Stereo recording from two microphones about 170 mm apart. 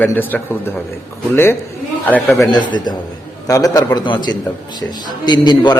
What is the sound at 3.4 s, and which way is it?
A man's voice, 20° left (ahead or behind).